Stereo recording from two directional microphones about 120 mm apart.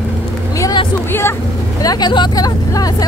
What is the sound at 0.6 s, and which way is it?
Vehicle, 30° left (ahead or behind).